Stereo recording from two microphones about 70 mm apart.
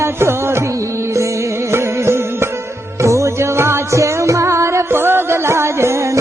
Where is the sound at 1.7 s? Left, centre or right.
Right.